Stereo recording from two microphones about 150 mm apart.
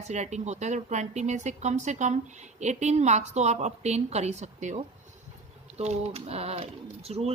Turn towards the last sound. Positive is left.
turn(degrees=-45)  # may be behind; listen again after turning